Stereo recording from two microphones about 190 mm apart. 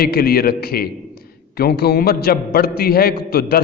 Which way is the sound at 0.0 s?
55° left (ahead or behind).